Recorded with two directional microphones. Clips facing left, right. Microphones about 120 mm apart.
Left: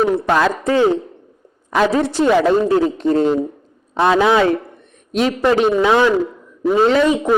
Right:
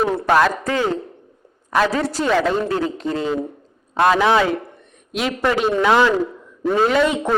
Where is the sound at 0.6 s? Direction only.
20° left (ahead or behind).